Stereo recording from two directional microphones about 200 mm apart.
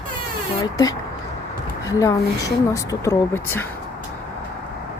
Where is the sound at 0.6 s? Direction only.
20° left (ahead or behind).